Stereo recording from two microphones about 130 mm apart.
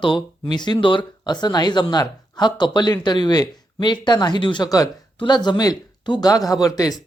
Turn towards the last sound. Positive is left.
turn(degrees=30)  # may be behind; listen again after turning